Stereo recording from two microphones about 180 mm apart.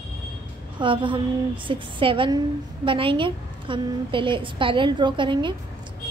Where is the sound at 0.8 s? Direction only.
30° right (ahead or behind).